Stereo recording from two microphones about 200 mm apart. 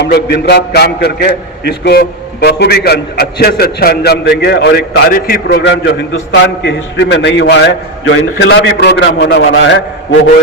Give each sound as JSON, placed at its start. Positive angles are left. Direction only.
{"t": 0.0, "sound": "a man's voice", "side_deg": 55}